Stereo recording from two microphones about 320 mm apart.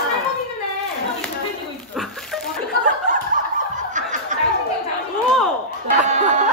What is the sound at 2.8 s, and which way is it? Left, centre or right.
Snicker, right.